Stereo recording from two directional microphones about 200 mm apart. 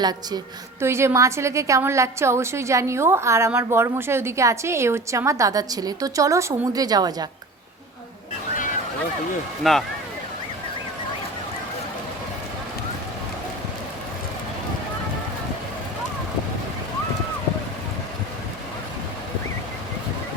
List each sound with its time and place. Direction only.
0.0 s a woman's voice: 20° right (ahead or behind)
9.7 s speech: centre (ahead or behind)